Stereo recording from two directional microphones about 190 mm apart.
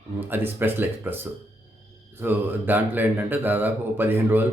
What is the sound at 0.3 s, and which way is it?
Speech, 10° right (ahead or behind).